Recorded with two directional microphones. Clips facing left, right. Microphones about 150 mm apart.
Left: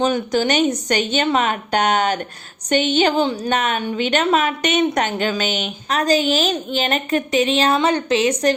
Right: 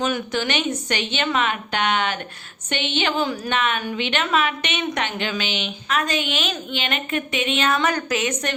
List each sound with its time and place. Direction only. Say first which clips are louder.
0.0 s a woman's voice: left 5 dB; 35° left (ahead or behind)